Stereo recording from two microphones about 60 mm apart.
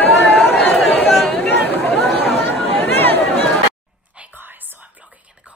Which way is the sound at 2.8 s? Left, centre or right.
Left.